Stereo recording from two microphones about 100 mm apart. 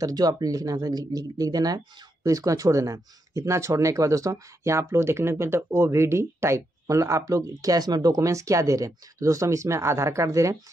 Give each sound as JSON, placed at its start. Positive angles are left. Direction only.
{"t": 0.0, "sound": "speech", "side_deg": -40}